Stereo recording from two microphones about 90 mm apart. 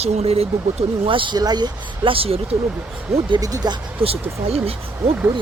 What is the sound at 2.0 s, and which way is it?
Speech, 90° right.